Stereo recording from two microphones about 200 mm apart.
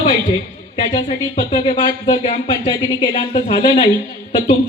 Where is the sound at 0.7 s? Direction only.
25° left (ahead or behind).